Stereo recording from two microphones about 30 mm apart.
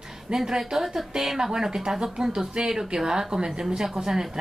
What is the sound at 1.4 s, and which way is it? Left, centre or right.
A woman's voice, right.